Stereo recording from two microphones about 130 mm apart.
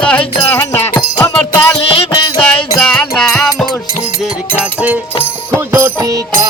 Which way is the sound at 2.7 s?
5° left (ahead or behind).